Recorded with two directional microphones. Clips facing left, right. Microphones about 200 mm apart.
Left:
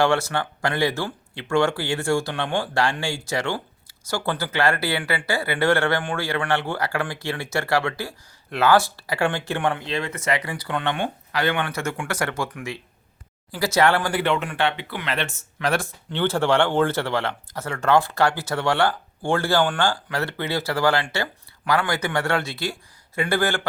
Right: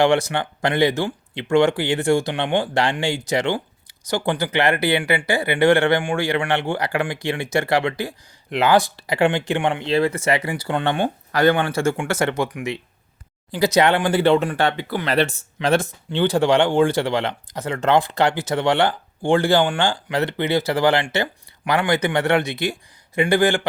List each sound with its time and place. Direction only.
0.0 s speech: 15° right (ahead or behind)
9.8 s speech: 30° right (ahead or behind)
15.5 s speech: 25° right (ahead or behind)